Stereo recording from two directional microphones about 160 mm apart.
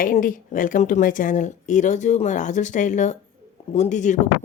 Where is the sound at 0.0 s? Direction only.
55° left (ahead or behind).